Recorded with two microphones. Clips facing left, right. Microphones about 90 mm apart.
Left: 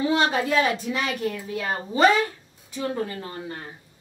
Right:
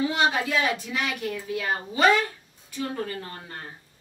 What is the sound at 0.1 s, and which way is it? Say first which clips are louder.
A woman's voice: left 3 dB; 35° left (ahead or behind).